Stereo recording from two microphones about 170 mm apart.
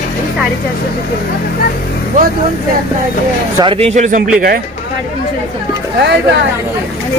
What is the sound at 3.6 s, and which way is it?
Speech, 35° right (ahead or behind).